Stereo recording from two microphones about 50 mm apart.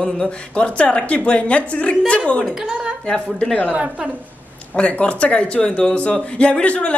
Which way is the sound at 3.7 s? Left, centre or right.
Right.